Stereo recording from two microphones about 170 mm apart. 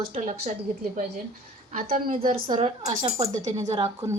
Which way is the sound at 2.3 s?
35° right (ahead or behind).